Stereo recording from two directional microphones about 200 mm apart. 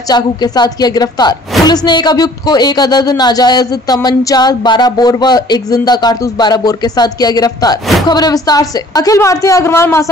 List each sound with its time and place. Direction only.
0.1 s speech: 20° left (ahead or behind)